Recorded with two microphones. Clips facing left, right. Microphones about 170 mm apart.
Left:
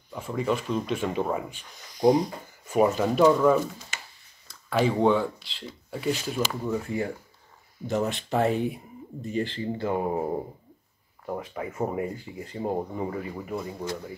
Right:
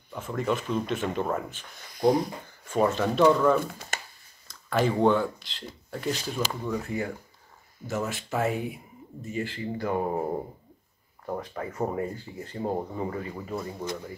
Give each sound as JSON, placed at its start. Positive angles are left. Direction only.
{"t": 0.1, "sound": "speech", "side_deg": 5}
{"t": 2.7, "sound": "speech", "side_deg": 10}
{"t": 3.9, "sound": "a sound", "side_deg": -50}
{"t": 4.5, "sound": "speech", "side_deg": 0}
{"t": 6.7, "sound": "speech", "side_deg": 25}
{"t": 8.5, "sound": "speech", "side_deg": 0}
{"t": 9.3, "sound": "speech", "side_deg": 30}